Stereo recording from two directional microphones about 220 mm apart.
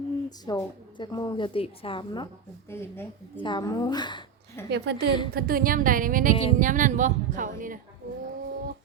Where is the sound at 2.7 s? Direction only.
10° left (ahead or behind).